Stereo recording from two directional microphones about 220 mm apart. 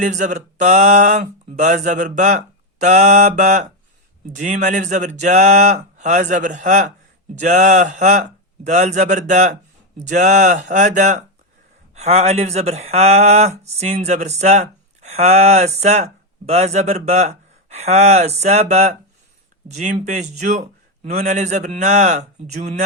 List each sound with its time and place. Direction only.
0.0 s a man's voice: 35° right (ahead or behind)